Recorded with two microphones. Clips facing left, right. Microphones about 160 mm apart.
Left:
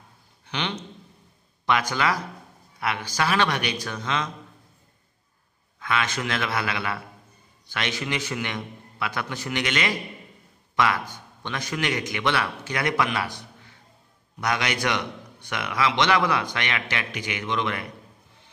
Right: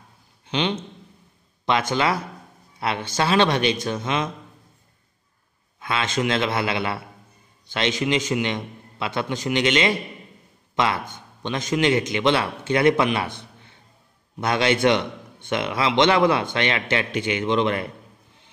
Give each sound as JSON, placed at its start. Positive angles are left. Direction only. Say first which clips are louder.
{"t": 0.5, "sound": "a man's voice", "louder": "right 6 dB", "side_deg": -20}
{"t": 5.8, "sound": "a man's voice", "louder": "right 3 dB", "side_deg": -25}